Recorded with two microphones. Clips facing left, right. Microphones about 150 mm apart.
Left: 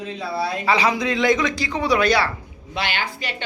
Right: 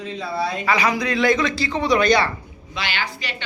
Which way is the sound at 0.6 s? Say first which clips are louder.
Left 2 dB; 30° left (ahead or behind).